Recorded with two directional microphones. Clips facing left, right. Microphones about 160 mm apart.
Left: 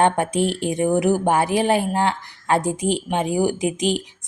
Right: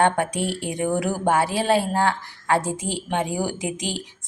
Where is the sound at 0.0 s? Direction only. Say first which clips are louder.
Left 3 dB; 20° left (ahead or behind).